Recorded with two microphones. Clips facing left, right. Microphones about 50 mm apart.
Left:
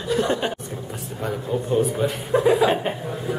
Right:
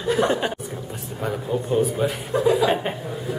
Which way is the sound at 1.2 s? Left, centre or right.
Centre.